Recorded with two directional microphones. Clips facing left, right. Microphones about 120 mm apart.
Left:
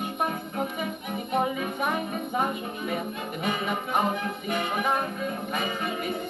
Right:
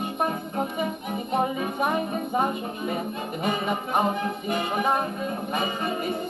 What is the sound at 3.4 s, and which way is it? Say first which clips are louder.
Music: right 2 dB; 30° right (ahead or behind).